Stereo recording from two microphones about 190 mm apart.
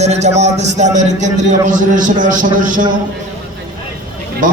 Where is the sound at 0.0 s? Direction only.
35° right (ahead or behind).